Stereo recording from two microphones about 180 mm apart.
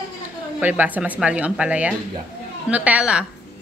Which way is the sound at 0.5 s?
10° right (ahead or behind).